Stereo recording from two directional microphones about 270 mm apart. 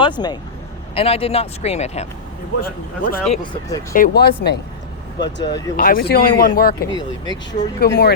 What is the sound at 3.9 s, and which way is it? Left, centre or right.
Speech, left.